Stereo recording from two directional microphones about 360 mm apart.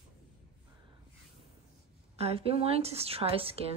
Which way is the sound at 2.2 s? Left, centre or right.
Centre.